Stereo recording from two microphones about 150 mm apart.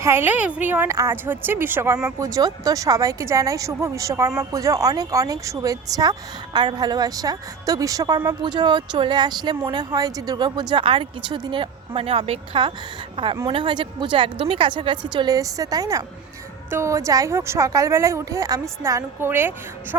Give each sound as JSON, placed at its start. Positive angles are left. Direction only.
{"t": 0.0, "sound": "a woman's voice", "side_deg": -15}